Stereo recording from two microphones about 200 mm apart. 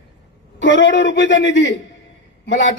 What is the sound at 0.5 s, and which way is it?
Speech, 65° left (ahead or behind).